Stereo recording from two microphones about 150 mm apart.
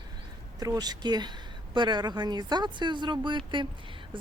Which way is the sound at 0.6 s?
25° right (ahead or behind).